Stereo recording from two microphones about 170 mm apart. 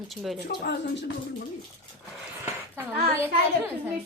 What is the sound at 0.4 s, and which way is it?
Speech, 80° left.